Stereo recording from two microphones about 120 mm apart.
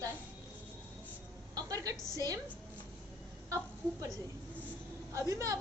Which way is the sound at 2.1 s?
30° right (ahead or behind).